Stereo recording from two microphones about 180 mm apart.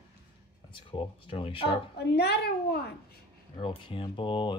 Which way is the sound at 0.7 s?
30° left (ahead or behind).